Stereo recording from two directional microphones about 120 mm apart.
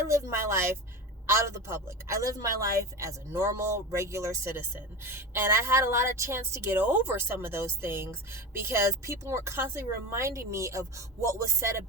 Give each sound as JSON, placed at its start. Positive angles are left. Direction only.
{"t": 0.1, "sound": "a woman's voice", "side_deg": -20}